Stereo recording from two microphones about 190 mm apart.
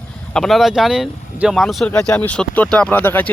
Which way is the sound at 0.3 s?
Centre (ahead or behind).